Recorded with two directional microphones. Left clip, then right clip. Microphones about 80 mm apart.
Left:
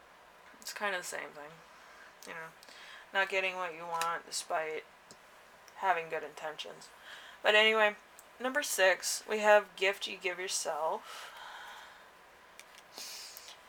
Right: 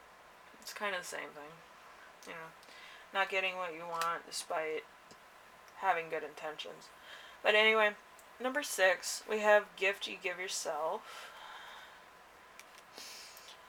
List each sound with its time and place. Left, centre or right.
0.6 s speech: left
5.8 s speech: left
13.0 s a sound: left